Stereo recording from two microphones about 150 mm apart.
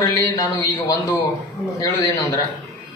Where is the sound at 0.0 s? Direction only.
25° left (ahead or behind).